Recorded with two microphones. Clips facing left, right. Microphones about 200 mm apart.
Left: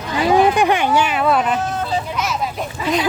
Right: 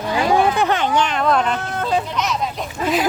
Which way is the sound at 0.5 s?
15° left (ahead or behind).